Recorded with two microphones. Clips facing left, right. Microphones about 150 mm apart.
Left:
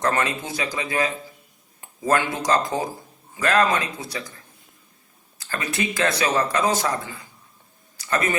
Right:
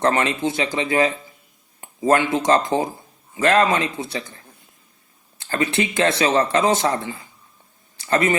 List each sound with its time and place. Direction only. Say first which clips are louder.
0.1 s speech: right 4 dB; 25° right (ahead or behind)
5.4 s speech: right 6 dB; 25° right (ahead or behind)
7.9 s speech: right 5 dB; 25° right (ahead or behind)